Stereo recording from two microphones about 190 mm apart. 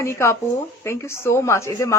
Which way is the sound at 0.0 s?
15° left (ahead or behind).